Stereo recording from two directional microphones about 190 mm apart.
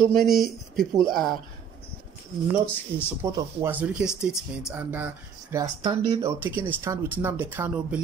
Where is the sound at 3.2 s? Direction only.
15° right (ahead or behind).